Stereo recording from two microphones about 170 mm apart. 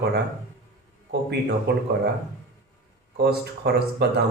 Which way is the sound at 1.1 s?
80° right.